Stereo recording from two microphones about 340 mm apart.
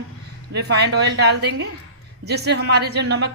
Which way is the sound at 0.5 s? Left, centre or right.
Right.